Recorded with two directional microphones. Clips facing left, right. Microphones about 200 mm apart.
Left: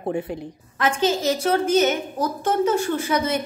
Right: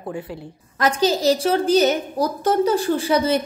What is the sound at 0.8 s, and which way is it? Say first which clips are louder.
A woman's voice: right 2 dB; 40° right (ahead or behind).